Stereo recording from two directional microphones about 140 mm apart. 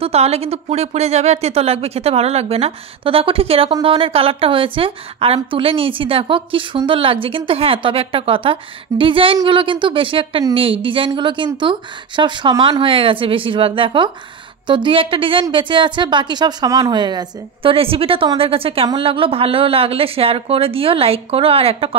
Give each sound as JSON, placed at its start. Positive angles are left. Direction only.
{"t": 0.0, "sound": "a woman's voice", "side_deg": -45}